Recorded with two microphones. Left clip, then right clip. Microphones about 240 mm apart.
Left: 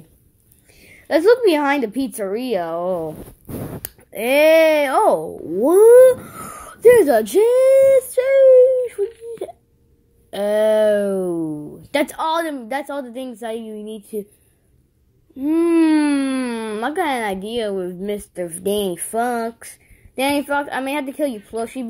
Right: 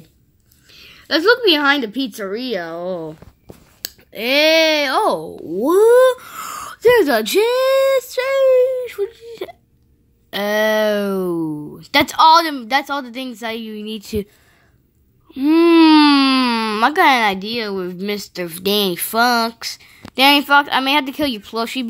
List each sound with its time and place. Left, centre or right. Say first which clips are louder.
1.0 s a child's voice: even; centre
6.6 s a sound: left 2 dB; centre
7.1 s speech: left 1 dB; right
14.1 s speech: right 4 dB; right
15.3 s speech: right 5 dB; right